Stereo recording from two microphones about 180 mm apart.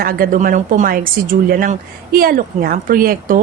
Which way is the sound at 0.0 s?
55° right (ahead or behind).